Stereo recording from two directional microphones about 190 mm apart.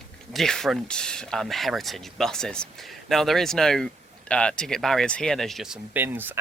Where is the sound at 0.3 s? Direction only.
Centre (ahead or behind).